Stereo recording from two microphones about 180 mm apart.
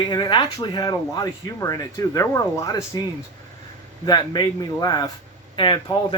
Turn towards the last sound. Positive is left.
turn(degrees=25)  # may be behind; listen again after turning